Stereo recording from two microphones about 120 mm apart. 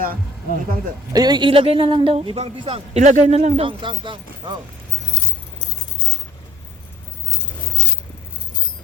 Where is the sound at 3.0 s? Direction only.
75° right (ahead or behind).